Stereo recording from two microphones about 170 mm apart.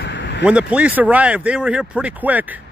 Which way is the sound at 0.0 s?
90° left.